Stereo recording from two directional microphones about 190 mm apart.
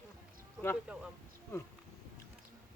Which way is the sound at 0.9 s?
5° right (ahead or behind).